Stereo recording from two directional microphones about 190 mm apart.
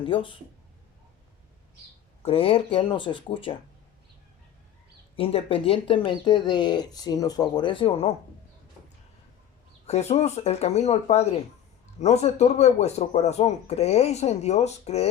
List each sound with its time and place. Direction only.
0.0 s speech: 25° left (ahead or behind)
2.2 s speech: 30° left (ahead or behind)
5.1 s speech: 30° left (ahead or behind)
9.8 s speech: 35° left (ahead or behind)